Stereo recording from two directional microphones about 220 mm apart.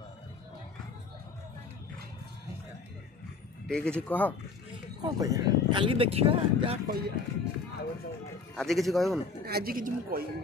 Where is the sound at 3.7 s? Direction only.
5° left (ahead or behind).